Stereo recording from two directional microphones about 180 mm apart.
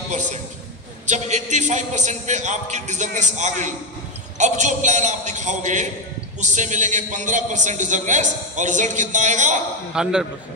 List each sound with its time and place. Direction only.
0.1 s a man's voice: 40° right (ahead or behind)
9.9 s a man's voice: 5° right (ahead or behind)